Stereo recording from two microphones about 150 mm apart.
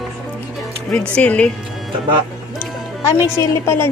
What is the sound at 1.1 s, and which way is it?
Speech, 10° left (ahead or behind).